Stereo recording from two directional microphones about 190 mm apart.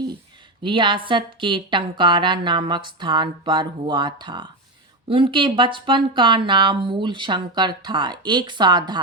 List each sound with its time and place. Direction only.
0.6 s speech: 25° right (ahead or behind)